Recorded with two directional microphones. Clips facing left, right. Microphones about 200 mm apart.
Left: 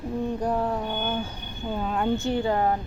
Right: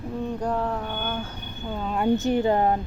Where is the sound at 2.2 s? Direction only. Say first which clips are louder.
Right 3 dB; 20° right (ahead or behind).